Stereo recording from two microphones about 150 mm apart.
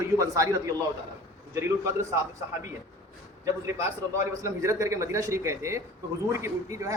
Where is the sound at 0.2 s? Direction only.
20° right (ahead or behind).